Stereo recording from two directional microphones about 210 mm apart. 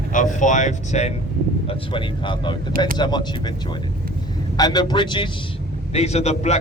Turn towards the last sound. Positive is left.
turn(degrees=30)  # may be behind; listen again after turning